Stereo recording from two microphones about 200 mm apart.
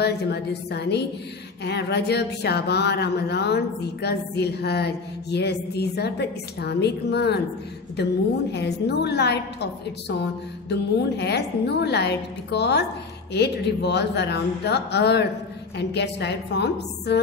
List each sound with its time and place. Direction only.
0.0 s speech: 55° left (ahead or behind)